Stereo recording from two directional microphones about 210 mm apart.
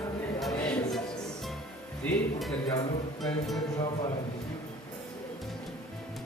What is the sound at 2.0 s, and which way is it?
Music, 5° left (ahead or behind).